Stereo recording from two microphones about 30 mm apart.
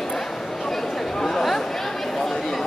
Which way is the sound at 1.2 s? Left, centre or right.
Centre.